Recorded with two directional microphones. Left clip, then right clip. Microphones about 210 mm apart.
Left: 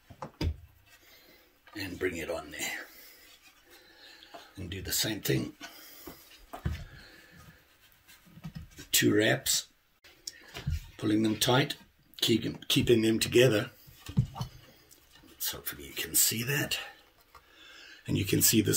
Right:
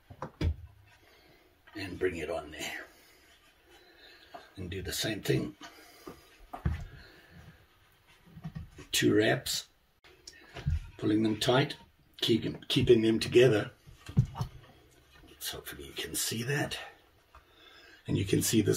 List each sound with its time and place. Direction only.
1.7 s speech: 30° left (ahead or behind)
4.6 s speech: 25° left (ahead or behind)
8.9 s speech: 30° left (ahead or behind)
11.0 s speech: 30° left (ahead or behind)
15.3 s a sound: 25° left (ahead or behind)
18.0 s speech: 25° left (ahead or behind)